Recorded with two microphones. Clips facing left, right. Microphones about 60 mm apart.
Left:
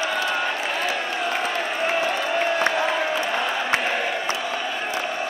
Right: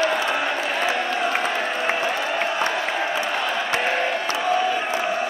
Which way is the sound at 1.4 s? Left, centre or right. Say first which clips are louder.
Right 1 dB; centre.